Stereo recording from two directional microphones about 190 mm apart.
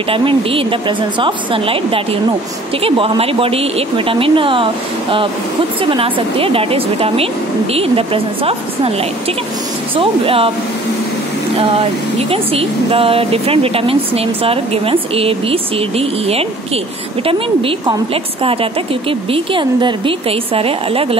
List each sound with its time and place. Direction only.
0.1 s speech: 30° right (ahead or behind)
5.9 s speech: 25° right (ahead or behind)
9.9 s speech: 30° right (ahead or behind)
12.3 s speech: 30° right (ahead or behind)